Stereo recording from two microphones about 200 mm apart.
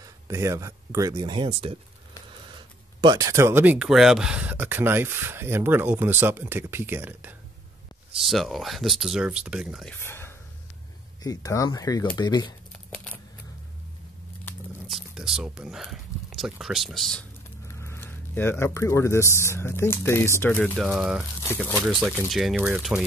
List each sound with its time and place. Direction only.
0.0 s speech: 15° right (ahead or behind)
9.9 s speech: 10° left (ahead or behind)
12.7 s crumpling: 5° left (ahead or behind)
14.9 s speech: centre (ahead or behind)